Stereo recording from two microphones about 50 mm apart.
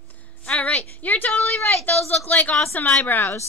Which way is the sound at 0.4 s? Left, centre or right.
Left.